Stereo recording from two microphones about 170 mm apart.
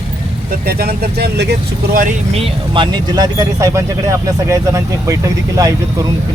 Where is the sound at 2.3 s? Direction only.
30° right (ahead or behind).